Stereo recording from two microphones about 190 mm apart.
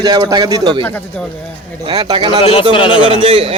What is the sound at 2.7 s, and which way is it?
Speech, 25° left (ahead or behind).